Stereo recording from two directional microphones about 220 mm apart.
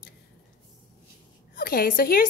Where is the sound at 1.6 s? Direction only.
40° left (ahead or behind).